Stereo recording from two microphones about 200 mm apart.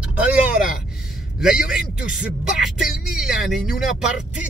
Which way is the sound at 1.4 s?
5° right (ahead or behind).